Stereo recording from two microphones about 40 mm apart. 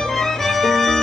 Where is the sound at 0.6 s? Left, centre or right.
Centre.